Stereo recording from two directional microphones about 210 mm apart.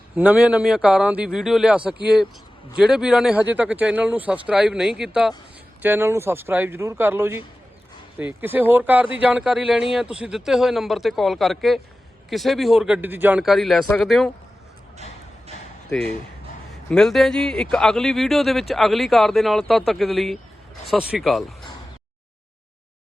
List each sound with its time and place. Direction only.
0.2 s speech: 5° right (ahead or behind)
16.9 s speech: centre (ahead or behind)